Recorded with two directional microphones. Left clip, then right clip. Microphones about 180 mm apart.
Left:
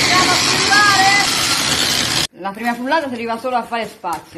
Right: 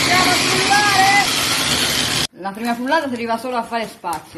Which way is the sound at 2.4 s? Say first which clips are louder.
Left 1 dB; centre (ahead or behind).